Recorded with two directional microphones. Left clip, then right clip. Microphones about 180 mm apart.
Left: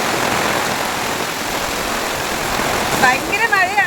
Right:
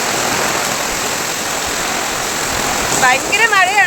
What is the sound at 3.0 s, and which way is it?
Speech, centre (ahead or behind).